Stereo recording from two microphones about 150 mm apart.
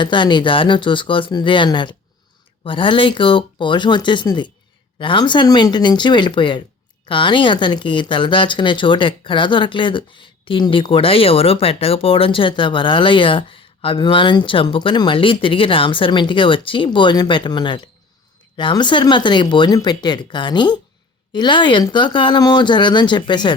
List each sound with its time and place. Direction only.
0.0 s speech: 30° left (ahead or behind)